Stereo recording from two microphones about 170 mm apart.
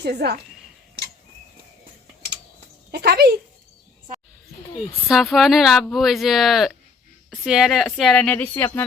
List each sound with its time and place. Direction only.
0.0 s speech: 75° right (ahead or behind)
2.9 s speech: 70° right (ahead or behind)
5.0 s speech: centre (ahead or behind)